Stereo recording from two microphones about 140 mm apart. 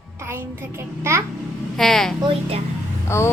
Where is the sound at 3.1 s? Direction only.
20° left (ahead or behind).